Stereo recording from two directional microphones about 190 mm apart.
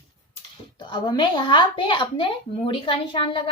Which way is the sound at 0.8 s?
25° left (ahead or behind).